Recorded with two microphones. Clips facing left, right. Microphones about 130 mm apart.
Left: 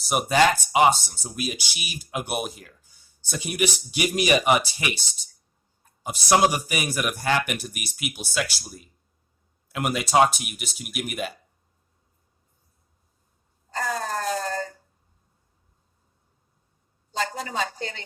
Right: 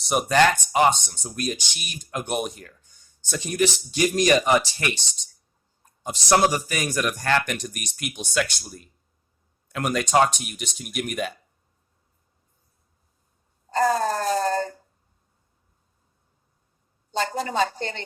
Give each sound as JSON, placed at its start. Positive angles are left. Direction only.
{"t": 0.0, "sound": "speech", "side_deg": 5}
{"t": 13.7, "sound": "wail", "side_deg": -35}
{"t": 17.2, "sound": "a woman's voice", "side_deg": -35}